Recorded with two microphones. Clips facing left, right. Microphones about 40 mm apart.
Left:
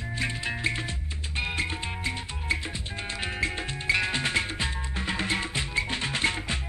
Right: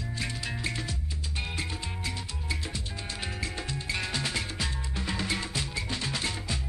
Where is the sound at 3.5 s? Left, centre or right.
Left.